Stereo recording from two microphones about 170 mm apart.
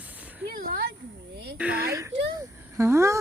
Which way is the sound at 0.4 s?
60° right (ahead or behind).